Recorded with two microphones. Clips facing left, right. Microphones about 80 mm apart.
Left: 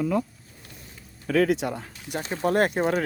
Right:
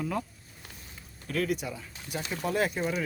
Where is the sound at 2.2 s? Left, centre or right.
Left.